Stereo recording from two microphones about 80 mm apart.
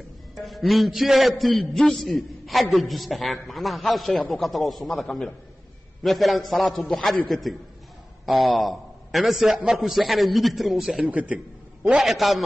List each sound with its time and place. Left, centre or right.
0.4 s a man's voice: centre
11.1 s a man's voice: centre
12.0 s a man's voice: centre